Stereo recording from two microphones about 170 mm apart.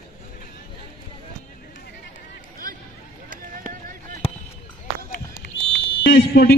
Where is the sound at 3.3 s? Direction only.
55° right (ahead or behind).